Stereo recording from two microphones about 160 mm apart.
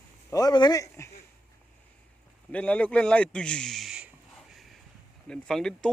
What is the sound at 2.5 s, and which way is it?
A man's voice, 10° left (ahead or behind).